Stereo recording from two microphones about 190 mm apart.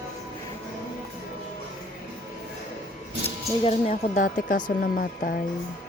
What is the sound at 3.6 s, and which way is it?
Speech, 35° left (ahead or behind).